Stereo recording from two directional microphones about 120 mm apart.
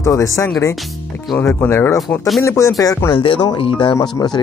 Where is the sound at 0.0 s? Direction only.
25° left (ahead or behind).